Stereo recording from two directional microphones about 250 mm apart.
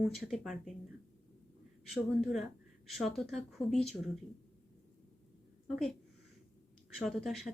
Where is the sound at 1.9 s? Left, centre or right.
Centre.